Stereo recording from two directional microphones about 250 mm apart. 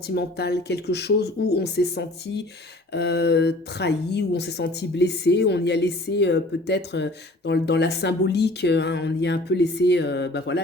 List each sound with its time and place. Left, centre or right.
0.1 s speech: left